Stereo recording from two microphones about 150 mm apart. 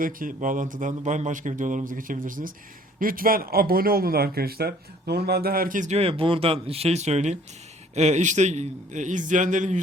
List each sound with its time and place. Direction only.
0.0 s speech: 65° right (ahead or behind)